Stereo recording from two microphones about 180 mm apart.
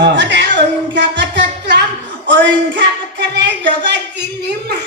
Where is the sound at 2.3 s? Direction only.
90° right.